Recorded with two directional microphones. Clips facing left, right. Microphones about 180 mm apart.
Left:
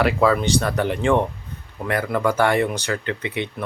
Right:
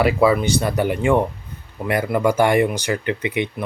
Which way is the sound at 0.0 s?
5° right (ahead or behind).